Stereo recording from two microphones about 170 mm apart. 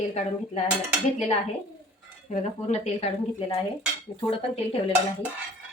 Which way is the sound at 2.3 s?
40° left (ahead or behind).